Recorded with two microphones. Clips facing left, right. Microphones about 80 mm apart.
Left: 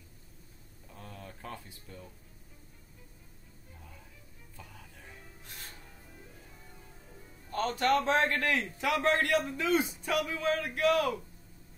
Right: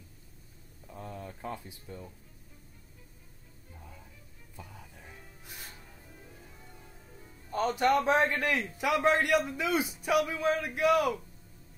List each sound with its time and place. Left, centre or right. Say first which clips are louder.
0.9 s a sound: right 5 dB; centre
4.6 s music: right 3 dB; centre
7.4 s a man's voice: right 2 dB; centre